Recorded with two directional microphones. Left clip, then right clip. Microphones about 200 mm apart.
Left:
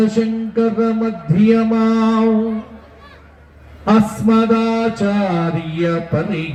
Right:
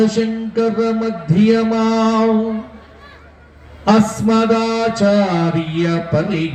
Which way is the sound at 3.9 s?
50° right (ahead or behind).